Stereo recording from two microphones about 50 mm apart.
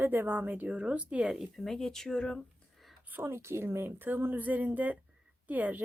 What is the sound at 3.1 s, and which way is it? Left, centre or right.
Speech, right.